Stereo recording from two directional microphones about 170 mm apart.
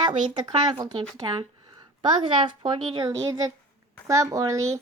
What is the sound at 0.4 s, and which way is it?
A woman's voice, 30° right (ahead or behind).